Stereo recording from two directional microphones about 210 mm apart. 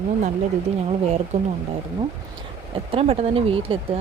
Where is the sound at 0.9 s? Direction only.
30° right (ahead or behind).